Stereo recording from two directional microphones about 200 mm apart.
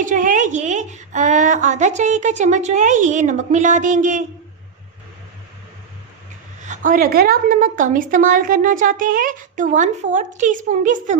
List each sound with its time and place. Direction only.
0.0 s a woman's voice: 40° right (ahead or behind)
6.6 s a woman's voice: 40° right (ahead or behind)